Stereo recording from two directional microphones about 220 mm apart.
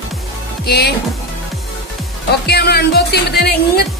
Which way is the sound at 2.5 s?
45° left (ahead or behind).